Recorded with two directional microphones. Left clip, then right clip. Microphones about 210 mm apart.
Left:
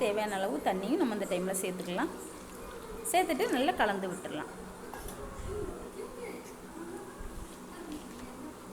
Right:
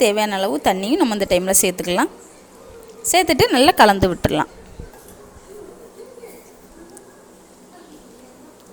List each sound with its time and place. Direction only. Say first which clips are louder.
0.0 s a woman's voice: right 14 dB; 55° right (ahead or behind)
3.1 s a woman's voice: right 14 dB; 50° right (ahead or behind)